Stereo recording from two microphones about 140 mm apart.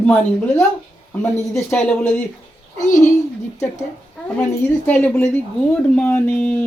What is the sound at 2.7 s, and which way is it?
Speech, 60° left (ahead or behind).